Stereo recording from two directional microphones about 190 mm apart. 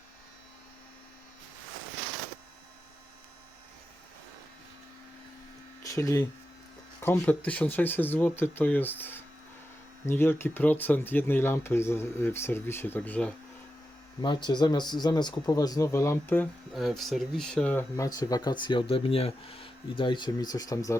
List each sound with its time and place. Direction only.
5.8 s speech: 15° left (ahead or behind)
14.2 s speech: 20° left (ahead or behind)
16.7 s speech: centre (ahead or behind); by 20.9 s 20° left (ahead or behind)